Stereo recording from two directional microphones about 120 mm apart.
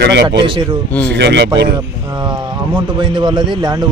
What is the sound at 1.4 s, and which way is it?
Speech, 35° right (ahead or behind).